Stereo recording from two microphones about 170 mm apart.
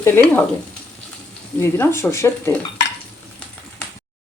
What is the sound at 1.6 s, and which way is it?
Speech, 15° left (ahead or behind).